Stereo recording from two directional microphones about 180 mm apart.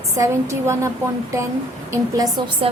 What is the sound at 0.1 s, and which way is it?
Speech, 15° right (ahead or behind).